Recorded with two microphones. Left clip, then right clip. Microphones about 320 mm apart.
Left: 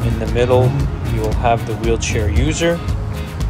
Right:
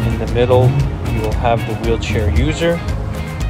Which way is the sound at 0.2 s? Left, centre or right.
Centre.